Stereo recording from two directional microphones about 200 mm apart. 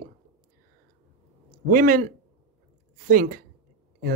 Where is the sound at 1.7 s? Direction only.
45° right (ahead or behind).